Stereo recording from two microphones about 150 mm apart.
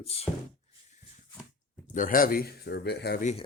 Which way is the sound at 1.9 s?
65° left (ahead or behind).